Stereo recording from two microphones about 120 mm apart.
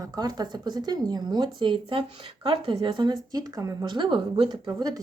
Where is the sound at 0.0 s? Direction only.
30° right (ahead or behind).